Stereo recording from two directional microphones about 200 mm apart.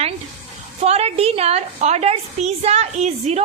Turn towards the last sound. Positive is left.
turn(degrees=-30)  # may be behind; listen again after turning